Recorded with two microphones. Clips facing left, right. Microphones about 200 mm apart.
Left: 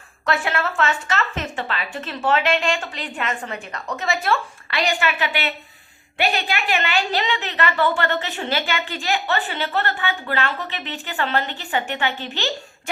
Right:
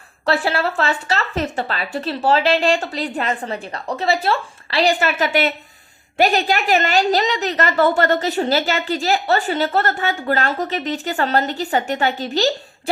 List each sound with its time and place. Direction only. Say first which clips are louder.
0.3 s a woman's voice: right 4 dB; 35° right (ahead or behind)